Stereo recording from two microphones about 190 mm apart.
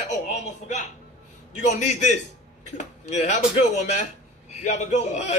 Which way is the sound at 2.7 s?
40° left (ahead or behind).